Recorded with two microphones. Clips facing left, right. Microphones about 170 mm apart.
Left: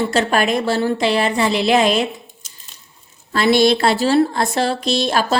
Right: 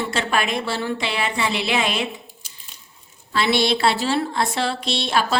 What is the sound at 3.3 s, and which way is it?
Speech, 45° left (ahead or behind).